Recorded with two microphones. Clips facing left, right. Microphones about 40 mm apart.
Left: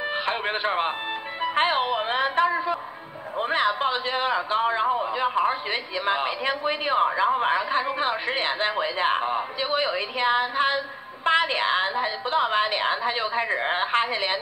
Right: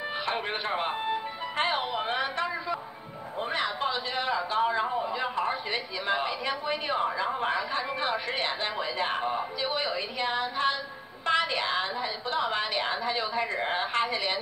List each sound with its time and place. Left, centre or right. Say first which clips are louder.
0.1 s a man's voice: left 3 dB; left